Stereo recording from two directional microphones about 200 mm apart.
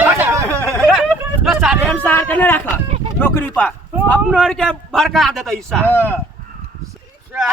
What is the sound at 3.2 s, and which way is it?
A man's voice, 10° left (ahead or behind).